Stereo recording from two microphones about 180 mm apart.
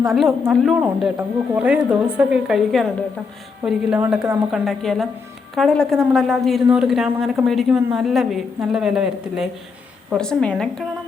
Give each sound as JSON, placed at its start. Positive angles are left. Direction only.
{"t": 0.0, "sound": "a woman's voice", "side_deg": 0}
{"t": 4.6, "sound": "a woman's voice", "side_deg": 0}